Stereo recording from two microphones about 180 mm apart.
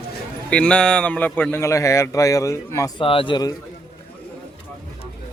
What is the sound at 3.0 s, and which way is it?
Speech, 30° left (ahead or behind).